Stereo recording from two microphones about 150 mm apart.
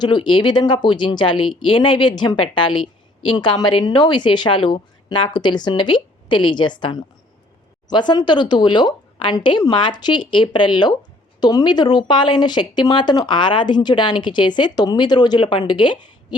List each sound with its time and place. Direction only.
0.0 s speech: 30° left (ahead or behind)